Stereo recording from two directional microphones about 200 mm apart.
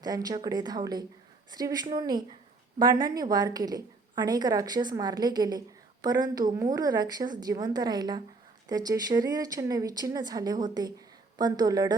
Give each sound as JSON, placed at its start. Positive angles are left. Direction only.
{"t": 0.0, "sound": "a woman's voice", "side_deg": -20}